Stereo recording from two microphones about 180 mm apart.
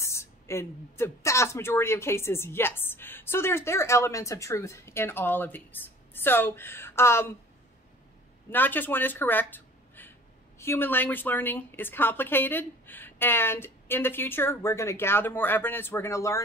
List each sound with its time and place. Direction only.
0.0 s speech: 15° left (ahead or behind)
8.5 s speech: 10° left (ahead or behind)